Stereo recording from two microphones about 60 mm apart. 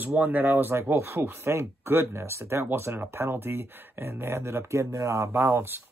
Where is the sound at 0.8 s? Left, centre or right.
Right.